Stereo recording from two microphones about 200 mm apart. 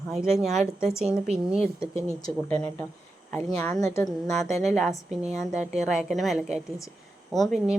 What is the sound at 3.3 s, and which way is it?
Speech, 10° left (ahead or behind).